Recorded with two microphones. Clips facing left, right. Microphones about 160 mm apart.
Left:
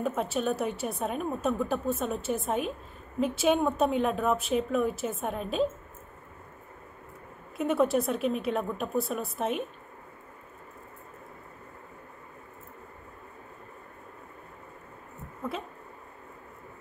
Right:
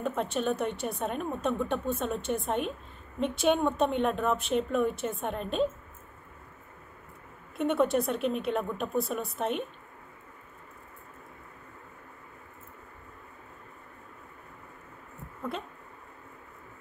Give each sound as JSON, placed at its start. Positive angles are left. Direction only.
{"t": 0.0, "sound": "a woman's voice", "side_deg": 5}
{"t": 7.5, "sound": "a woman's voice", "side_deg": 0}